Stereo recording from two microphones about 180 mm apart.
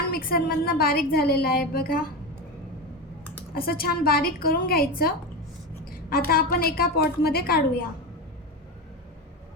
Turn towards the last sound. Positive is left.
turn(degrees=60)  # may be behind; listen again after turning